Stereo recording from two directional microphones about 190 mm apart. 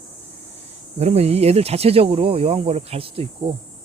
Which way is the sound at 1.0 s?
35° right (ahead or behind).